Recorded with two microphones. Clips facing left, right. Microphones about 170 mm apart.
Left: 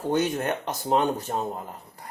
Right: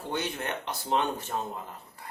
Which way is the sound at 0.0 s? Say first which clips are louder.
Left 8 dB; 45° left (ahead or behind).